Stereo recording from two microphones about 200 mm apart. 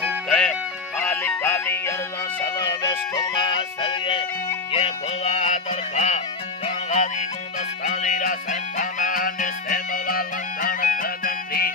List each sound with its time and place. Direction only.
0.3 s music: 5° left (ahead or behind); by 11.7 s 50° left (ahead or behind)